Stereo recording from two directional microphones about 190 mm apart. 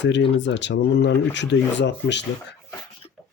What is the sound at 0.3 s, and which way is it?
Speech, 70° left (ahead or behind).